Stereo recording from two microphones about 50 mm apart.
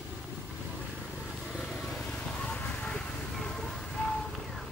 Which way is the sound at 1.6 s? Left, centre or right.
Centre.